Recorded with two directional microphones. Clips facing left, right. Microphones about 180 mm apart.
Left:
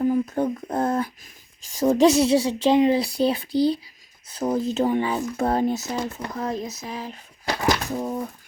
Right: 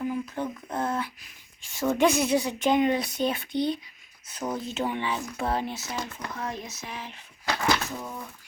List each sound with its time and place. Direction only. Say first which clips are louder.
0.0 s speech: left 8 dB; 40° left (ahead or behind)
6.0 s speech: left 6 dB; 30° left (ahead or behind)